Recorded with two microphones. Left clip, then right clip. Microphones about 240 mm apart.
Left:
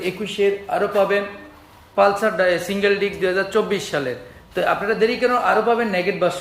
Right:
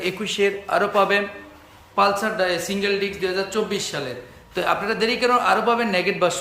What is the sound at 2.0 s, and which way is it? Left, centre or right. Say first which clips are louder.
A man's voice: left 3 dB; centre.